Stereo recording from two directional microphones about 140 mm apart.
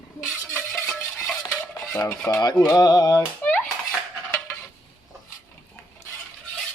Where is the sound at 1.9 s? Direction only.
15° left (ahead or behind).